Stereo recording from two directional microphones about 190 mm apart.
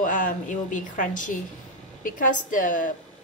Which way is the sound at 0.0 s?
45° left (ahead or behind).